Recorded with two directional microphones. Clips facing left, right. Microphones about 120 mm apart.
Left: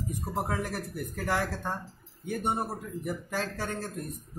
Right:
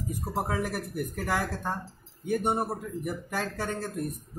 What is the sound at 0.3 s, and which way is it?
A man's voice, 10° right (ahead or behind).